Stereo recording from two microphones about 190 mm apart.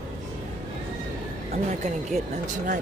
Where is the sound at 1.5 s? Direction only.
40° right (ahead or behind).